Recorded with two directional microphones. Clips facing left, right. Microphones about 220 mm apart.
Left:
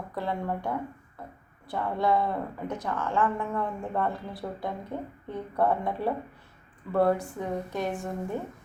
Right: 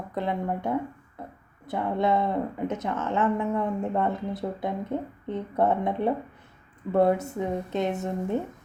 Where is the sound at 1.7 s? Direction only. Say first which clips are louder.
Right 2 dB; 20° right (ahead or behind).